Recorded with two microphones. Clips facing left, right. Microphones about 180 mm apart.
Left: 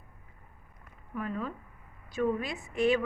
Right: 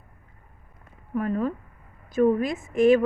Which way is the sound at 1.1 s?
45° right (ahead or behind).